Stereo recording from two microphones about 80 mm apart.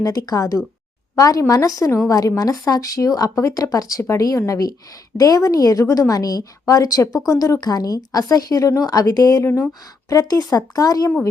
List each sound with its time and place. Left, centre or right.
0.0 s a woman's voice: left